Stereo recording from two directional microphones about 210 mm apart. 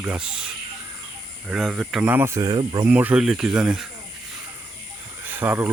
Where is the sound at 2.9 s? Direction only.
5° right (ahead or behind).